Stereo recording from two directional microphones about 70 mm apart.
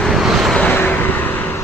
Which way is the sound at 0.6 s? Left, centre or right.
Left.